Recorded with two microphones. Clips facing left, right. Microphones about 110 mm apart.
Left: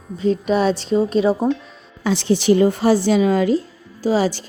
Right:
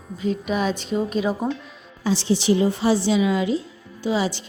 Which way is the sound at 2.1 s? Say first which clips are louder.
Left 4 dB; 55° left (ahead or behind).